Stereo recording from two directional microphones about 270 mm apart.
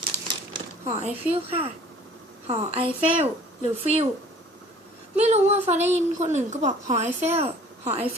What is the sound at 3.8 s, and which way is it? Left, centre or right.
Speech, right.